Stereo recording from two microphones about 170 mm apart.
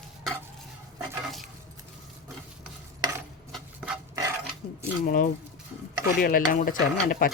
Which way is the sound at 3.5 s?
5° right (ahead or behind).